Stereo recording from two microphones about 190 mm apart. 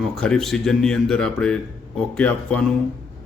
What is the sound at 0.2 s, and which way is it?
Speech, 5° left (ahead or behind).